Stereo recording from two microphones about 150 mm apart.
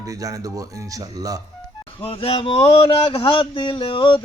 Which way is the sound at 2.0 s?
40° left (ahead or behind).